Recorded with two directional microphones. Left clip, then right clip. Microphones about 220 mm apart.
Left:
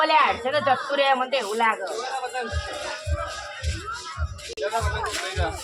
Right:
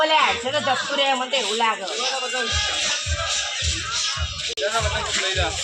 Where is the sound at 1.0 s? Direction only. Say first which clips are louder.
Even; 5° left (ahead or behind).